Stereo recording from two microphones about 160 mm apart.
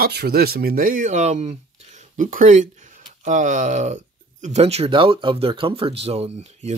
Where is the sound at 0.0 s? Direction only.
85° right.